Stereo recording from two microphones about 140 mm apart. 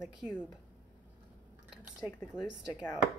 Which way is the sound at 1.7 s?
5° right (ahead or behind).